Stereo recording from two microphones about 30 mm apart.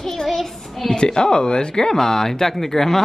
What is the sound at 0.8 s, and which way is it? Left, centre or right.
A woman's voice, left.